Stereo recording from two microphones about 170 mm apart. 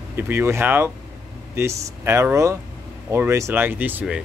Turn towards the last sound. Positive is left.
turn(degrees=-10)  # may be behind; listen again after turning